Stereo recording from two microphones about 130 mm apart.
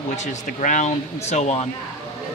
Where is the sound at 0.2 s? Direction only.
75° left (ahead or behind); by 1.6 s 60° left (ahead or behind).